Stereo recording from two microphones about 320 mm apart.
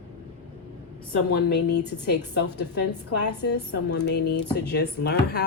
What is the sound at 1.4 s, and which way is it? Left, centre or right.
Speech, left.